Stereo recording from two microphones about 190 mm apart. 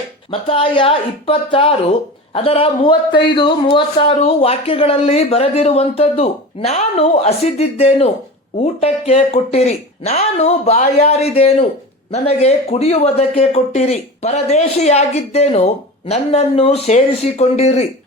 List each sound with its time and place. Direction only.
0.3 s speech: 30° left (ahead or behind)